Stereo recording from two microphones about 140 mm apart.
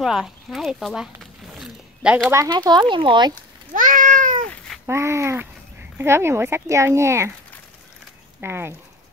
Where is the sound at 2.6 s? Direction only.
35° right (ahead or behind).